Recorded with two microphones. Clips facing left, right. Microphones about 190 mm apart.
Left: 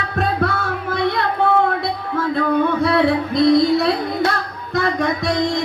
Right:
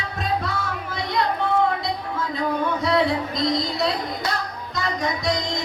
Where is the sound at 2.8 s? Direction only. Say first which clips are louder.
Left 5 dB; 60° left (ahead or behind).